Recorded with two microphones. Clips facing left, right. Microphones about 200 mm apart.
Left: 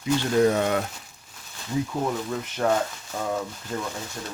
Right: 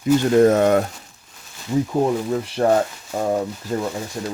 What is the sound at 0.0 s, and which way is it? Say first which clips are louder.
Speech: right 6 dB; 45° right (ahead or behind).